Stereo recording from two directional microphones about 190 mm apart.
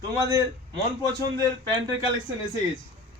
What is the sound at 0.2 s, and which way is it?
Speech, 20° right (ahead or behind).